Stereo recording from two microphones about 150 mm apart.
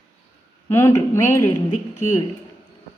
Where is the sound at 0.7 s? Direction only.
15° left (ahead or behind).